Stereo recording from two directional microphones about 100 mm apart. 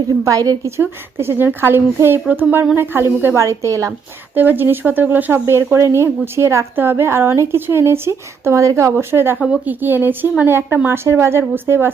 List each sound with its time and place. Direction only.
0.3 s a woman's voice: 35° right (ahead or behind)
0.8 s a woman's voice: 25° right (ahead or behind)
4.4 s a woman's voice: 20° right (ahead or behind)